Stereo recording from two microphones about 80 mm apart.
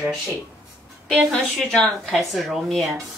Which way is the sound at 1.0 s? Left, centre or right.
Centre.